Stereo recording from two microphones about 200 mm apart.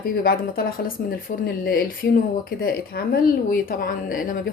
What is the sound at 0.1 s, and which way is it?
Speech, 45° left (ahead or behind).